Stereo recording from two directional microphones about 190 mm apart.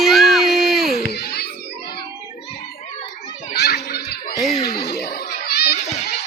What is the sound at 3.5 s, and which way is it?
Children playing, 60° left (ahead or behind).